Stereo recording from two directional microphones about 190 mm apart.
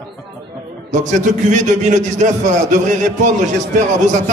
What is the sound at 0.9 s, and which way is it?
A man's voice, 40° right (ahead or behind).